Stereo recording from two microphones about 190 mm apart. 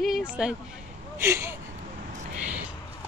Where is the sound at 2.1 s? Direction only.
40° right (ahead or behind).